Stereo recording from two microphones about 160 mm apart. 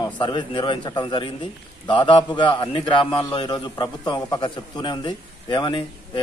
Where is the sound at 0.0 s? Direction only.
30° left (ahead or behind).